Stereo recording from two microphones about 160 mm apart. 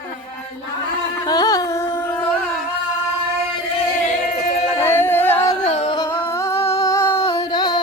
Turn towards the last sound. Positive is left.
turn(degrees=25)  # may be behind; listen again after turning